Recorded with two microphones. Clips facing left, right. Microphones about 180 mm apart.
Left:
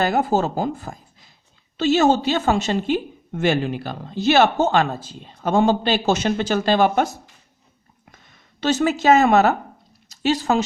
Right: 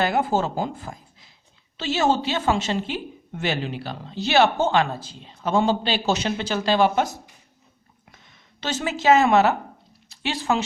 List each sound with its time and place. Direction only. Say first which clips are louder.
0.0 s speech: left 3 dB; 40° left (ahead or behind)
8.1 s speech: left 1 dB; 45° left (ahead or behind)